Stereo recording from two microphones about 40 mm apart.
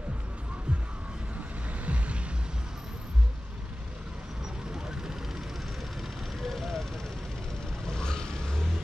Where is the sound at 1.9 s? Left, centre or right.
Right.